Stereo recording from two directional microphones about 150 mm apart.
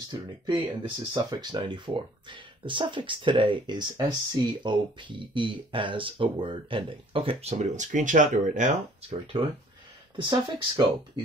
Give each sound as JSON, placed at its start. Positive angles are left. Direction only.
{"t": 0.1, "sound": "speech", "side_deg": -30}
{"t": 10.1, "sound": "speech", "side_deg": -30}